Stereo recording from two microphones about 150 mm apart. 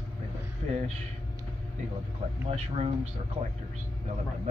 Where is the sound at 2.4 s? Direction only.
50° right (ahead or behind).